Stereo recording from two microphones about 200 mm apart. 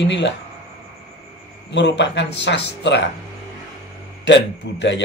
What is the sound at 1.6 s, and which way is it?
Speech, 60° left (ahead or behind).